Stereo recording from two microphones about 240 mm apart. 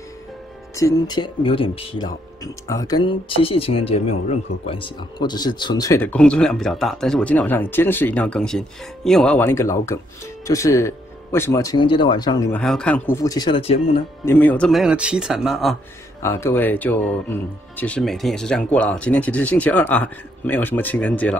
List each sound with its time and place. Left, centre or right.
0.7 s speech: centre
12.5 s speech: centre; by 13.7 s left
14.2 s speech: centre
16.2 s speech: centre